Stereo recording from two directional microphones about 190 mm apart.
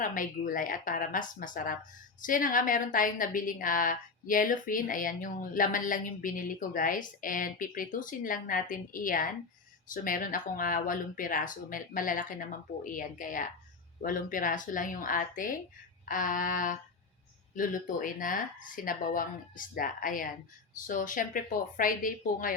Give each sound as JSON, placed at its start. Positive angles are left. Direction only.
{"t": 0.0, "sound": "a woman's voice", "side_deg": 45}